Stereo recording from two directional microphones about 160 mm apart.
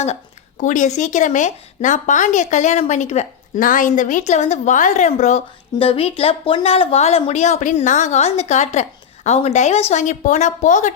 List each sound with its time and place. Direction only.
0.6 s a woman's voice: 50° left (ahead or behind)
5.8 s a woman's voice: 35° left (ahead or behind)